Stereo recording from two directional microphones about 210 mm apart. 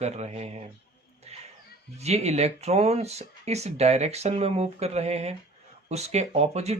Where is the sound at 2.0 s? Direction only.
30° right (ahead or behind).